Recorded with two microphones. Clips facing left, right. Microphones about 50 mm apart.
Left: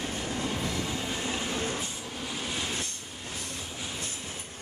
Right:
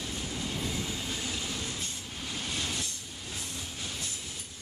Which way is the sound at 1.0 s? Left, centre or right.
Left.